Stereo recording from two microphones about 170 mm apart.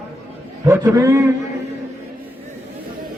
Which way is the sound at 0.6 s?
15° right (ahead or behind).